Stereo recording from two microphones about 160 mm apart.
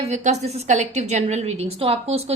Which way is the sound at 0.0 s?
45° right (ahead or behind).